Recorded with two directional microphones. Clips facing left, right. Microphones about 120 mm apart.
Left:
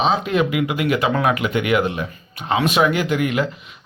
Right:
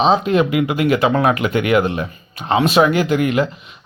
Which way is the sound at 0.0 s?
30° right (ahead or behind).